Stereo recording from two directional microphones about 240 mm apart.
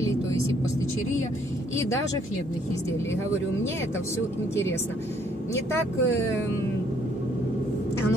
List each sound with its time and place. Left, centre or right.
5.5 s speech: centre